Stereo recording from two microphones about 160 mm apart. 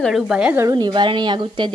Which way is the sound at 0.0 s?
5° right (ahead or behind).